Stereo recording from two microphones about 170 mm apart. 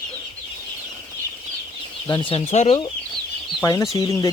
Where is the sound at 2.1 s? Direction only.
30° left (ahead or behind).